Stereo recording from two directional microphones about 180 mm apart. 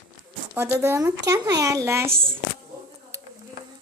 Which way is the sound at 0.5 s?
10° right (ahead or behind).